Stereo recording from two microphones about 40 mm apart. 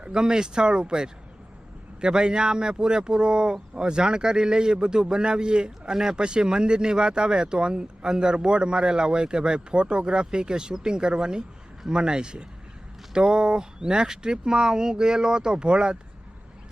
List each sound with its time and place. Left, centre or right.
0.0 s speech: right